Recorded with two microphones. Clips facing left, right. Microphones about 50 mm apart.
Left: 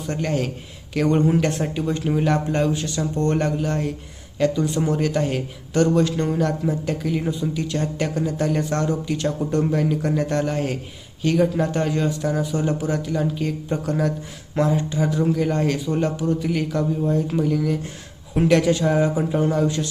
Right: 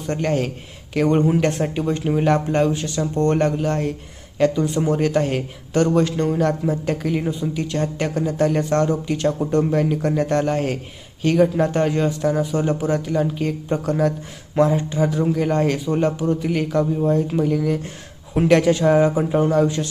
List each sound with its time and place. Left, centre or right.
0.1 s speech: right
0.9 s speech: right